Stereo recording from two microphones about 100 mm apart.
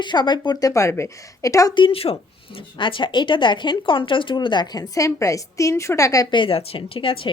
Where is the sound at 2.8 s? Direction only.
55° left (ahead or behind); by 6.3 s 35° left (ahead or behind).